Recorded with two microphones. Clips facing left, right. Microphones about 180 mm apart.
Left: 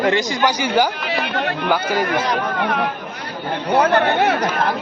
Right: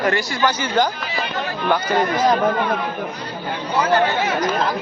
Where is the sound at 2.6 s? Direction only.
60° left (ahead or behind).